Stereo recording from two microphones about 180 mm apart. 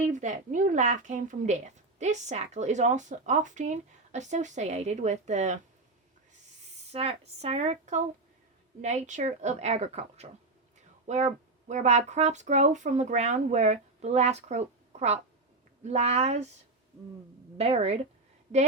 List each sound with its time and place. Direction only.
0.1 s speech: 45° right (ahead or behind)
6.9 s speech: 35° right (ahead or behind)
10.8 s a sound: 40° right (ahead or behind)
11.7 s speech: 40° right (ahead or behind)
17.6 s speech: 35° right (ahead or behind)